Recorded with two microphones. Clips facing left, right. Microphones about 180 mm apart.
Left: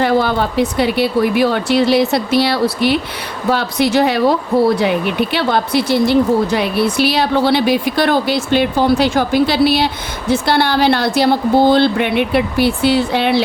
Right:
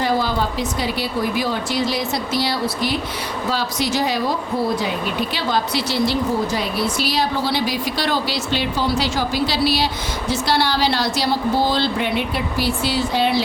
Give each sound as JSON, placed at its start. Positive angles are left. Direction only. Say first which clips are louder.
{"t": 0.0, "sound": "speech", "louder": "left 6 dB", "side_deg": 60}